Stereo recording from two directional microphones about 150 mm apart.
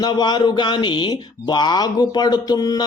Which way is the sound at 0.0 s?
30° left (ahead or behind).